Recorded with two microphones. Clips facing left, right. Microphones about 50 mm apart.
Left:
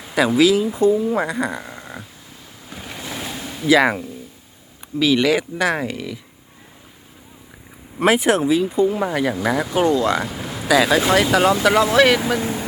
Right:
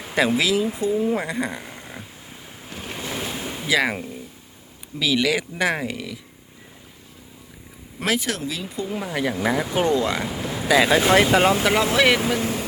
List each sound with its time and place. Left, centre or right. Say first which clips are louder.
0.2 s speech: left 5 dB; centre
0.7 s speech: left 5 dB; centre
1.3 s speech: left 3 dB; centre
1.6 s a sound: left 3 dB; centre
2.6 s waves: even; centre
3.4 s a sound: left 2 dB; centre
3.7 s speech: left 7 dB; centre
4.9 s speech: left 5 dB; centre
8.0 s speech: left 9 dB; left
8.6 s speech: left 10 dB; centre
12.4 s speech: left 1 dB; left